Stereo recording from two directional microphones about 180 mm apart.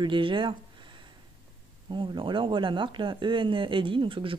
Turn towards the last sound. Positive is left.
turn(degrees=-30)  # may be behind; listen again after turning